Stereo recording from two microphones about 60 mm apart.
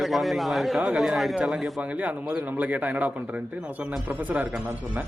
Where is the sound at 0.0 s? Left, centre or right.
Centre.